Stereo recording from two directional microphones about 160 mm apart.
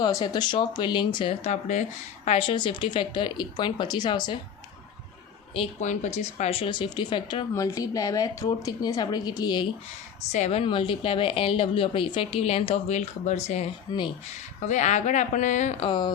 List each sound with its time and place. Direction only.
0.0 s a woman's voice: 25° left (ahead or behind)
1.5 s a woman's voice: 50° left (ahead or behind); by 4.4 s 30° left (ahead or behind)
5.5 s a woman's voice: 45° left (ahead or behind); by 9.6 s 25° left (ahead or behind)
10.3 s a woman's voice: 45° left (ahead or behind)
13.9 s a woman's voice: 25° left (ahead or behind)
14.6 s a woman's voice: 50° left (ahead or behind)
15.8 s a woman's voice: 30° left (ahead or behind)